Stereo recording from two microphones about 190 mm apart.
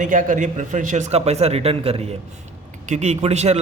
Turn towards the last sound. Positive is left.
turn(degrees=-35)  # may be behind; listen again after turning